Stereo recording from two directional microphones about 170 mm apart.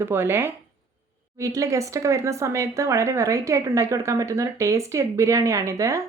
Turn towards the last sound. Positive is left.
turn(degrees=-15)  # may be behind; listen again after turning